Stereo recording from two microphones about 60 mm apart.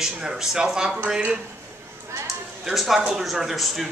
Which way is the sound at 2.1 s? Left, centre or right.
Right.